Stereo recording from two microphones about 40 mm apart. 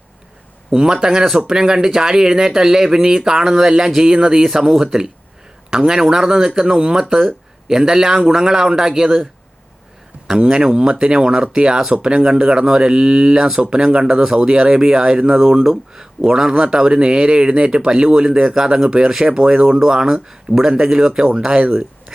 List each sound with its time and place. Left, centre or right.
0.7 s speech: centre
10.2 s speech: centre